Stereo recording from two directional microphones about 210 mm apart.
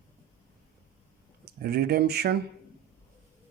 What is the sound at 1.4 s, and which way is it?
Speech, 50° right (ahead or behind).